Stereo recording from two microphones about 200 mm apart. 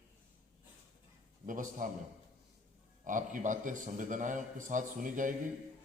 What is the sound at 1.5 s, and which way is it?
Speech, 40° right (ahead or behind).